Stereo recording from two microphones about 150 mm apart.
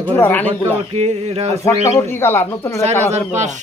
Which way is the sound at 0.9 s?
45° right (ahead or behind).